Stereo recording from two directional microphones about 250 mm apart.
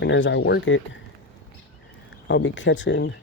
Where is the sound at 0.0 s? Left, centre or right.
Left.